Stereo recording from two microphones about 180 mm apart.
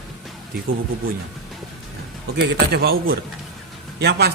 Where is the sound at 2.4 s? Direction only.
60° right (ahead or behind).